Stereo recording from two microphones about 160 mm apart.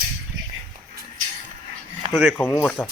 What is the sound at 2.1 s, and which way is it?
Speech, 5° right (ahead or behind).